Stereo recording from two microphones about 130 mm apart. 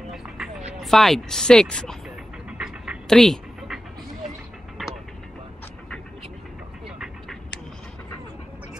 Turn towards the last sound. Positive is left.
turn(degrees=-5)  # may be behind; listen again after turning